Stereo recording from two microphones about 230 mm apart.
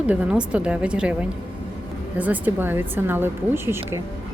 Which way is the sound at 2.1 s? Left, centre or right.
Centre.